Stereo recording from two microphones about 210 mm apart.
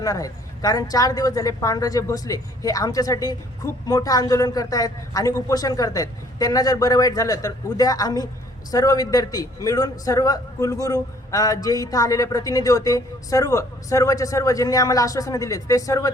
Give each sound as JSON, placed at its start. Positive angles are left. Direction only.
{"t": 0.0, "sound": "a man's voice", "side_deg": 15}